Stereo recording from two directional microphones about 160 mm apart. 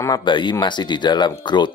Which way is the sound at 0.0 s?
25° left (ahead or behind).